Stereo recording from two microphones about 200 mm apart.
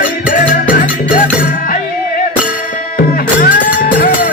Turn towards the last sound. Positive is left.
turn(degrees=45)  # may be behind; listen again after turning